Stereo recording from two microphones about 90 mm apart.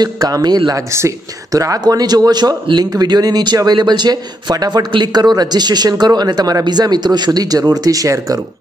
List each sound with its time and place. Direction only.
0.0 s speech: 45° right (ahead or behind)
0.9 s speech: 35° right (ahead or behind)